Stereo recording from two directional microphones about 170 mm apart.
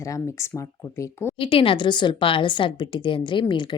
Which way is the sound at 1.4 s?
35° left (ahead or behind).